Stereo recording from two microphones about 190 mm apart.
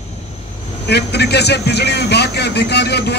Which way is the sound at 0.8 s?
60° left (ahead or behind).